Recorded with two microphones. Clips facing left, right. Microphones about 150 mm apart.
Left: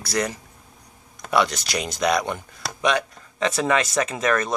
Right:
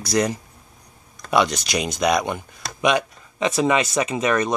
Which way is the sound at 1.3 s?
15° right (ahead or behind).